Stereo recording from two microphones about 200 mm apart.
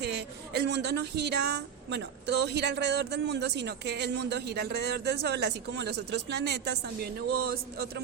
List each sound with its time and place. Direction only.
0.0 s a woman's voice: 55° right (ahead or behind)